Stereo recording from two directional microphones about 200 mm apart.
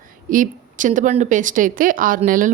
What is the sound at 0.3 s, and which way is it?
A woman's voice, 40° right (ahead or behind).